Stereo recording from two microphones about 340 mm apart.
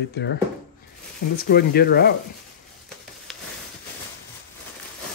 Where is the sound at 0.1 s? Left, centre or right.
Left.